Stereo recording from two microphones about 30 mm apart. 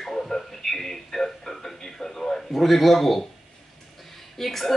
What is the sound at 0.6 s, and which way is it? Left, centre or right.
A woman's voice, centre.